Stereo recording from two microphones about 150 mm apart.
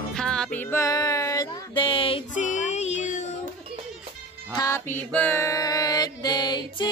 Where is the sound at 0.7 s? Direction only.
20° left (ahead or behind).